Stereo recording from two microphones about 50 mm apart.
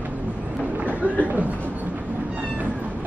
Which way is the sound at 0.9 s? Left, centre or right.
Right.